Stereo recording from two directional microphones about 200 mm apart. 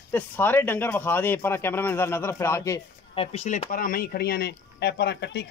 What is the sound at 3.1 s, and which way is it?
A man's voice, 30° left (ahead or behind).